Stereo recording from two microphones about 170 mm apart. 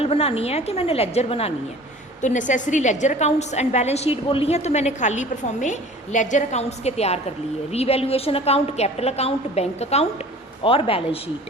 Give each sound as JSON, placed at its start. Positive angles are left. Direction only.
{"t": 0.0, "sound": "a woman's voice", "side_deg": 35}